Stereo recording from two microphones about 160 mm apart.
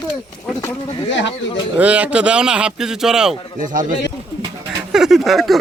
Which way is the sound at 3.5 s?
55° right (ahead or behind).